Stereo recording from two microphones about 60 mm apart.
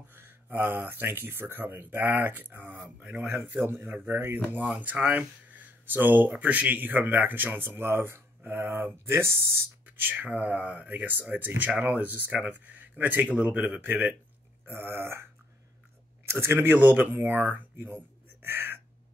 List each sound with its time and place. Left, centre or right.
0.1 s speech: right
3.3 s speech: right
3.9 s speech: right
9.8 s speech: right
14.7 s speech: right
16.3 s speech: right